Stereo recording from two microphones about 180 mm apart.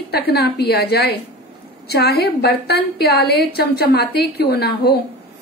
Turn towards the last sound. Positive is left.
turn(degrees=60)  # may be behind; listen again after turning